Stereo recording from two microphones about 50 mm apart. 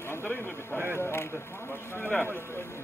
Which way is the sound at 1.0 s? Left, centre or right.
Left.